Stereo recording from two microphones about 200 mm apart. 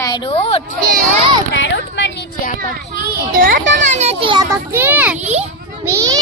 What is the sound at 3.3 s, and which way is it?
Speech, 45° right (ahead or behind).